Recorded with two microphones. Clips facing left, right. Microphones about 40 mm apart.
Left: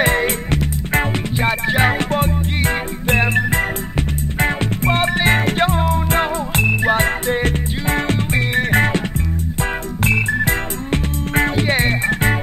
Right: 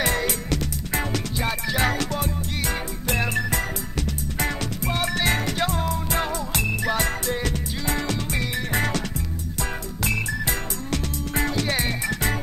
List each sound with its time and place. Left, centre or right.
0.0 s music: left